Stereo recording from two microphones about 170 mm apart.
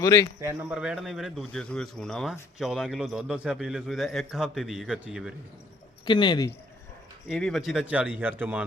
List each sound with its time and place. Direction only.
0.0 s speech: 20° left (ahead or behind)
0.4 s speech: 5° right (ahead or behind)
6.1 s speech: 25° left (ahead or behind)
7.3 s speech: centre (ahead or behind)